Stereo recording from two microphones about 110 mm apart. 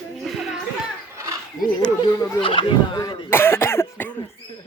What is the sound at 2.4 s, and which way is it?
Speech, 50° left (ahead or behind).